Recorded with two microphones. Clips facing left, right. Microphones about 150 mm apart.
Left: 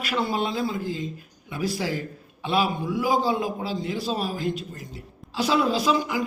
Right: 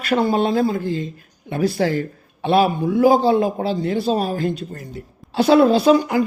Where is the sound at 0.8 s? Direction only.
5° left (ahead or behind).